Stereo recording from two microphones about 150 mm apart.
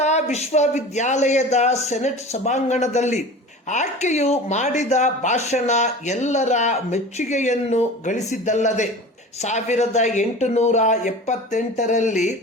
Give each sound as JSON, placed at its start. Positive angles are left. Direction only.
{"t": 0.0, "sound": "speech", "side_deg": 50}